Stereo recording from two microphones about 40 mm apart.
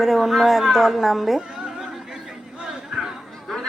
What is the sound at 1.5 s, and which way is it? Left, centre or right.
Music, centre.